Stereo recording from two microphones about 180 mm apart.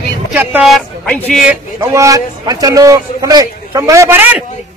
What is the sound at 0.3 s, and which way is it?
Speech, 10° right (ahead or behind).